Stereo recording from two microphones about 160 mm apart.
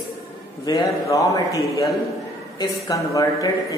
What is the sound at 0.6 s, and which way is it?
Speech, 20° left (ahead or behind).